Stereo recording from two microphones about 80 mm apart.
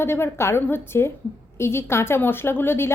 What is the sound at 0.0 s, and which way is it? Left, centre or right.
A woman's voice, left.